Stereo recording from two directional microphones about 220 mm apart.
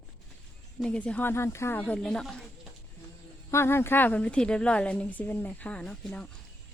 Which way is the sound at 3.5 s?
10° left (ahead or behind).